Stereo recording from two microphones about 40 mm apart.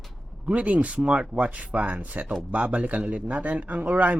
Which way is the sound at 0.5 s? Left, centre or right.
Right.